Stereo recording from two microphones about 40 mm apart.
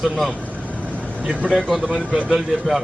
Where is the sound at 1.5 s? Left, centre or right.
Centre.